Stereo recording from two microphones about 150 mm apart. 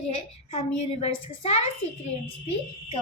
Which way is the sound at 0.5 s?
40° left (ahead or behind).